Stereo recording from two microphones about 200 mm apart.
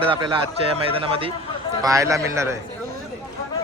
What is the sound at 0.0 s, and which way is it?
A man's voice, 25° right (ahead or behind).